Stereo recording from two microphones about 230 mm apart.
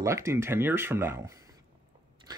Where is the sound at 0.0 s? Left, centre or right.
Centre.